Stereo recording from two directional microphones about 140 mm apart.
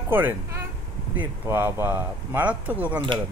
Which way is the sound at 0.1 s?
15° right (ahead or behind).